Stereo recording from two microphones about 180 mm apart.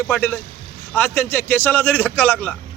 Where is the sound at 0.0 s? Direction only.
10° left (ahead or behind).